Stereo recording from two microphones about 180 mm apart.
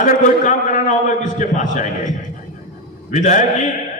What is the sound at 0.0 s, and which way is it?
A man's voice, 45° left (ahead or behind).